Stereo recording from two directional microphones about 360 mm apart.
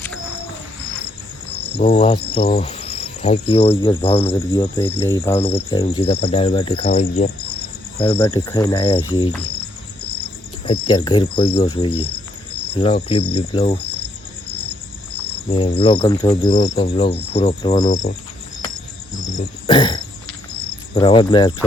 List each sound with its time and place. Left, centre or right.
1.7 s speech: left
4.2 s cricket: centre
10.7 s cricket: centre
15.4 s cricket: centre
19.4 s cricket: centre